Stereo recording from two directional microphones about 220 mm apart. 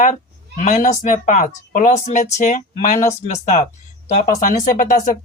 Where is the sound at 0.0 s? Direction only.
35° left (ahead or behind).